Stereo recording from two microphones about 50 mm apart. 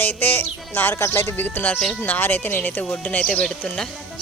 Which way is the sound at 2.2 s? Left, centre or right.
Left.